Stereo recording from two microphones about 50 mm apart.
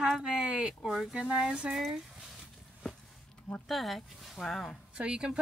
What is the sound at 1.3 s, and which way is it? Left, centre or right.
Speech, centre.